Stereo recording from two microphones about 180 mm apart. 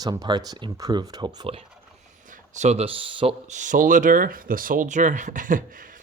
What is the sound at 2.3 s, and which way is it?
Speech, 40° right (ahead or behind).